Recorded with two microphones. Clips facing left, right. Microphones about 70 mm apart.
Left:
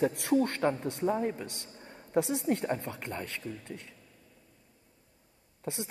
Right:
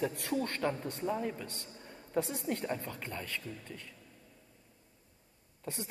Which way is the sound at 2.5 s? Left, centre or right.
Left.